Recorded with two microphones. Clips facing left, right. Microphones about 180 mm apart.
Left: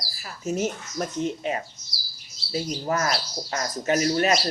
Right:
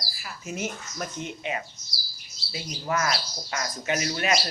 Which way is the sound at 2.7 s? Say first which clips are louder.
Even; 35° left (ahead or behind).